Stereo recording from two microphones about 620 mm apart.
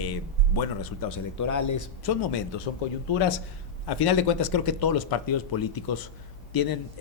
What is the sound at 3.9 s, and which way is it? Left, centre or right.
Speech, left.